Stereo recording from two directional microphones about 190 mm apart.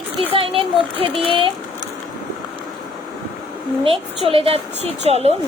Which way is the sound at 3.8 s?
30° right (ahead or behind).